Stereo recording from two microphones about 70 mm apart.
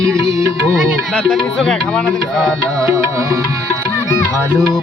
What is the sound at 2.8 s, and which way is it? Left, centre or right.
Music, right.